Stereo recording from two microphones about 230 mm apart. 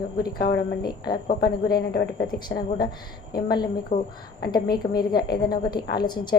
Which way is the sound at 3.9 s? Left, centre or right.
Left.